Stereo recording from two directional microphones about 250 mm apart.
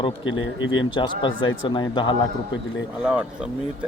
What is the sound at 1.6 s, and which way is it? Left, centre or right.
Speech, centre.